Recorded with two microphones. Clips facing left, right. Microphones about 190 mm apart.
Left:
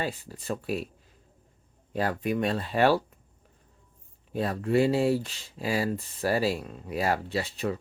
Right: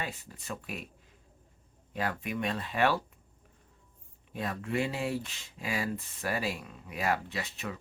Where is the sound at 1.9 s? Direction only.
35° left (ahead or behind).